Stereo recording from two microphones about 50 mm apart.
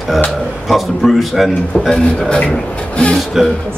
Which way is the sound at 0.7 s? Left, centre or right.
Centre.